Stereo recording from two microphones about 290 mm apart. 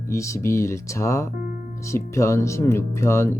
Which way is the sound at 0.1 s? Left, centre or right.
Centre.